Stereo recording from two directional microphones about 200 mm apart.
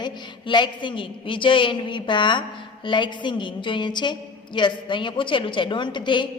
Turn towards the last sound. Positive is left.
turn(degrees=25)  # may be behind; listen again after turning